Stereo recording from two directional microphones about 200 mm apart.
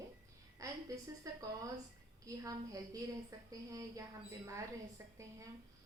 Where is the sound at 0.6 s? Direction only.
15° right (ahead or behind).